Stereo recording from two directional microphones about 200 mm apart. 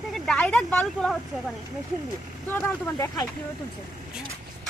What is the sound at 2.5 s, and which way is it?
Speech, 10° left (ahead or behind).